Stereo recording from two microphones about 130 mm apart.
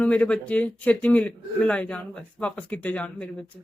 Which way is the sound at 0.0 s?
10° left (ahead or behind).